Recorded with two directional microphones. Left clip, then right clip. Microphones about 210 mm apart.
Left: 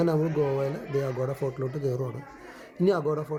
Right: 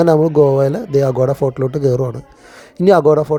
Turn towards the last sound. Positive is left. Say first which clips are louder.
# right 16 dB
turn(degrees=-35)  # may be behind; listen again after turning